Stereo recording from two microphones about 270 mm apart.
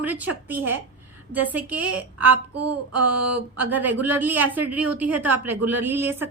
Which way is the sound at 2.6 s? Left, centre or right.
Right.